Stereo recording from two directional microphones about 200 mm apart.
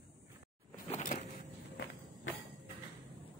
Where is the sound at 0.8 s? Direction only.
35° left (ahead or behind).